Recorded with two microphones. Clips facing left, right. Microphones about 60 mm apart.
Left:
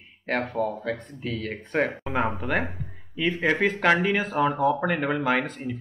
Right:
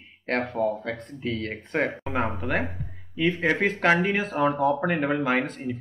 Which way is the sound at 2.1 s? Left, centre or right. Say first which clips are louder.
Left 2 dB; left.